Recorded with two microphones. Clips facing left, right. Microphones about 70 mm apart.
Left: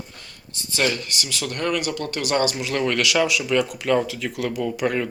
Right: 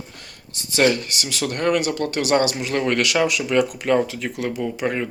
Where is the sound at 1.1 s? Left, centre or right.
Right.